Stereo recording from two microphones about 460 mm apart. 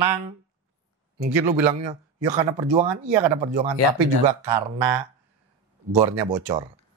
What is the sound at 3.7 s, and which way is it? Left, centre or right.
Speech, right.